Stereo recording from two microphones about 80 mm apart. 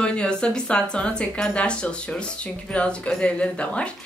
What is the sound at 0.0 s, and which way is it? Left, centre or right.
Speech, centre.